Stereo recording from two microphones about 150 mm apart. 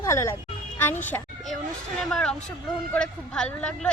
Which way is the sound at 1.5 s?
5° left (ahead or behind).